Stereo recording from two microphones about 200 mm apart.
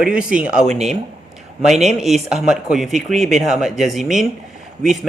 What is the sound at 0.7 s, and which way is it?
Speech, 35° right (ahead or behind).